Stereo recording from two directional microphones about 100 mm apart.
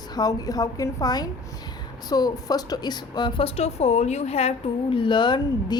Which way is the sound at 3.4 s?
90° left.